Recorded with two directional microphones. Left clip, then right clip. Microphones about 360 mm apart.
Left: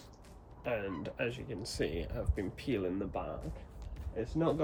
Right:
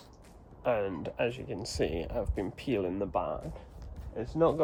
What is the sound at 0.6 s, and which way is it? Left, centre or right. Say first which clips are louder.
Speech: right 6 dB; centre.